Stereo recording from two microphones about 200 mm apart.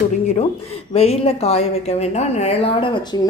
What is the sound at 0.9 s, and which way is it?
A woman's voice, 30° left (ahead or behind).